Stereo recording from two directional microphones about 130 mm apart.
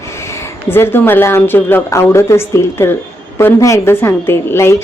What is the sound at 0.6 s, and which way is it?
A woman's voice, 15° left (ahead or behind).